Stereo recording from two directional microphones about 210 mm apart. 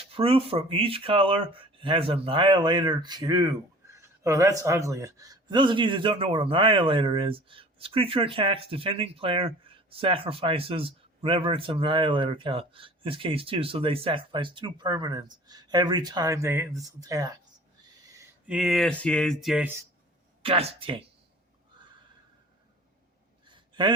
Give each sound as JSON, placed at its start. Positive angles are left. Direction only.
{"t": 0.2, "sound": "speech", "side_deg": -25}
{"t": 18.2, "sound": "speech", "side_deg": -5}
{"t": 20.4, "sound": "speech", "side_deg": -25}
{"t": 23.5, "sound": "a sound", "side_deg": -20}